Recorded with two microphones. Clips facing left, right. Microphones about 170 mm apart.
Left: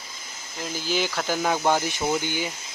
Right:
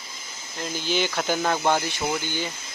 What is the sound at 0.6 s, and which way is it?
Speech, 5° left (ahead or behind).